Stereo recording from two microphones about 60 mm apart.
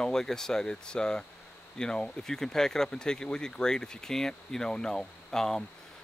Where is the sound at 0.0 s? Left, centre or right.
Centre.